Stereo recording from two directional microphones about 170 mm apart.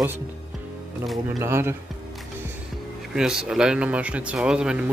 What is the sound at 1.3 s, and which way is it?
Speech, 15° right (ahead or behind).